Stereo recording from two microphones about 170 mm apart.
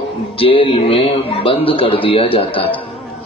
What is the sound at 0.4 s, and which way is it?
A man's voice, 30° left (ahead or behind).